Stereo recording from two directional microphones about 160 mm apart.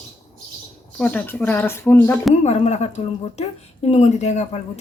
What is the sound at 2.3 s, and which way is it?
A woman's voice, 45° left (ahead or behind).